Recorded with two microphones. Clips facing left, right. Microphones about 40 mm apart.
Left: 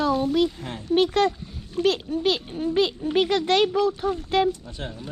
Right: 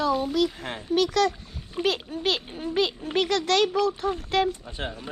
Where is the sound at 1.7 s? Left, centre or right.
Centre.